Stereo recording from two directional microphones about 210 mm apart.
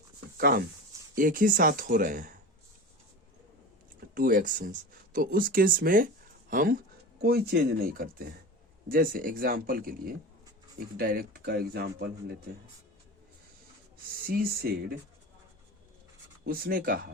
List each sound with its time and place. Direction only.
0.3 s speech: 45° right (ahead or behind)
4.1 s speech: 40° right (ahead or behind)
14.3 s speech: 45° right (ahead or behind)
16.5 s speech: 45° right (ahead or behind)